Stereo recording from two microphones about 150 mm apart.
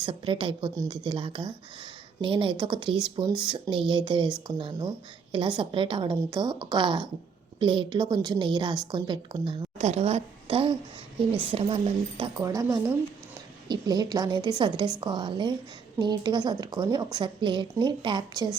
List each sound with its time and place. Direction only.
0.0 s a woman's voice: 35° right (ahead or behind)
9.7 s a woman's voice: 45° right (ahead or behind)
12.4 s a woman's voice: 20° right (ahead or behind)